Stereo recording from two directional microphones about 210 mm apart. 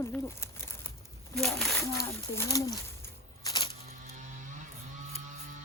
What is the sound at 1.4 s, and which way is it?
Speech, centre (ahead or behind).